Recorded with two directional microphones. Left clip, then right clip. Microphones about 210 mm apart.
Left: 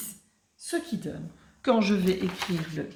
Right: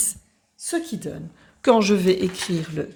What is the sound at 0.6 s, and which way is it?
A woman's voice, 45° right (ahead or behind).